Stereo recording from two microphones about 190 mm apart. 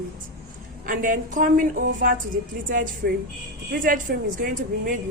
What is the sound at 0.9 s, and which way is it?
A woman's voice, 45° right (ahead or behind).